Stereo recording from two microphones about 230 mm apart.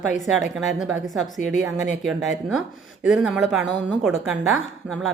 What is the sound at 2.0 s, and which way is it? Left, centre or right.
A woman's voice, centre.